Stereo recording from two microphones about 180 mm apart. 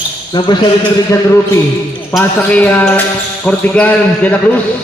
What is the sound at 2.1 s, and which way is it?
A man's voice, 5° left (ahead or behind).